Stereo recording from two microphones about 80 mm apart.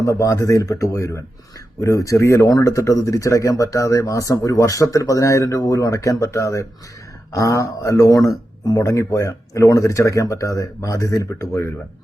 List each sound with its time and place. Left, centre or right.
0.0 s speech: left